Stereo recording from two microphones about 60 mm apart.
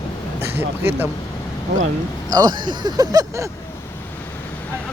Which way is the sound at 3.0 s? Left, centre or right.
Right.